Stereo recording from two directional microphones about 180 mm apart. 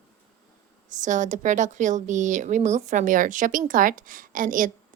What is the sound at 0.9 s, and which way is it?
Speech, 45° right (ahead or behind).